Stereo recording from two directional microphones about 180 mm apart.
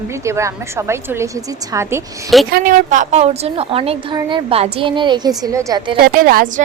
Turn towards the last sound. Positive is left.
turn(degrees=-55)  # may be behind; listen again after turning